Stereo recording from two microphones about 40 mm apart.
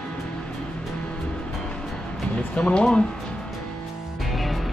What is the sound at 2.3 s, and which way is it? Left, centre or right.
Speech, left.